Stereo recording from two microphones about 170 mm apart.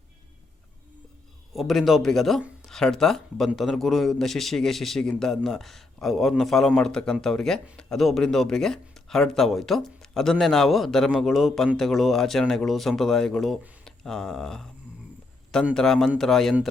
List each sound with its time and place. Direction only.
1.5 s speech: centre (ahead or behind)
15.7 s speech: 5° left (ahead or behind)